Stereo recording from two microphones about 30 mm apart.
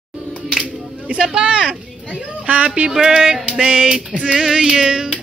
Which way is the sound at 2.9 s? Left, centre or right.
Centre.